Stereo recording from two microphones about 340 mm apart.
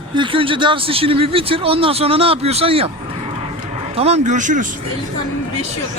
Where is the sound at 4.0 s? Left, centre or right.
Centre.